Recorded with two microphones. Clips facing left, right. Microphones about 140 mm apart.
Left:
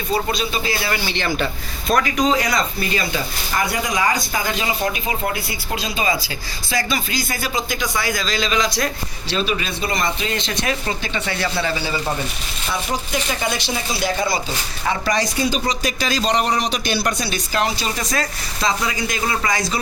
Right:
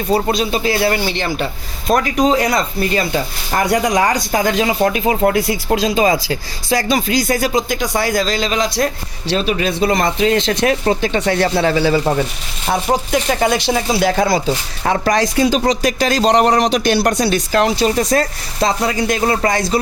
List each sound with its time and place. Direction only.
0.1 s speech: 65° right (ahead or behind)
0.9 s speech: 45° right (ahead or behind)
1.9 s a man's voice: 20° right (ahead or behind)
2.2 s speech: 55° right (ahead or behind)
4.4 s speech: 70° right (ahead or behind)
5.7 s speech: 90° right
6.2 s speech: 75° right (ahead or behind)
7.8 s speech: 35° right (ahead or behind)
8.2 s speech: 50° right (ahead or behind)
9.2 s speech: 70° right (ahead or behind)
12.6 s speech: 55° right (ahead or behind)
15.1 s a man's voice: 90° right
16.6 s a man's voice: 90° right
17.2 s speech: 75° right (ahead or behind); by 19.8 s 55° right (ahead or behind)